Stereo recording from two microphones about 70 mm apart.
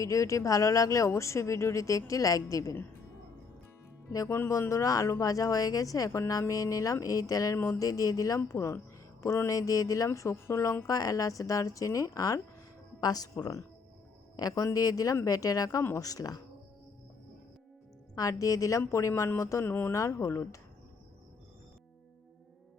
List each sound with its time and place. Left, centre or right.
0.0 s speech: left
4.3 s speech: left
4.7 s a woman's voice: left
7.5 s a woman's voice: left
8.4 s a woman's voice: left
9.5 s speech: left
10.1 s a woman's voice: left
10.8 s a woman's voice: left
18.1 s speech: left
19.6 s a woman's voice: left
19.9 s speech: left